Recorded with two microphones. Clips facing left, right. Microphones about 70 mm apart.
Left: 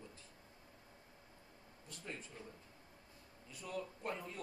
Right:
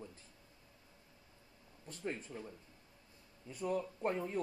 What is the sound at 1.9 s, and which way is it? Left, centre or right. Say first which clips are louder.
Speech: right 7 dB; right.